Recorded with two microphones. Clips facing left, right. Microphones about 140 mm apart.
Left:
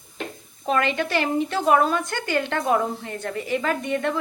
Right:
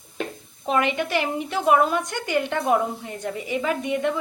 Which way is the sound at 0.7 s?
15° right (ahead or behind).